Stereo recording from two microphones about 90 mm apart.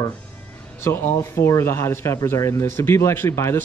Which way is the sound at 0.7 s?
25° left (ahead or behind).